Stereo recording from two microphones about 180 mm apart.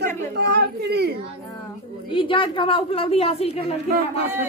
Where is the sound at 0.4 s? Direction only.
65° right (ahead or behind).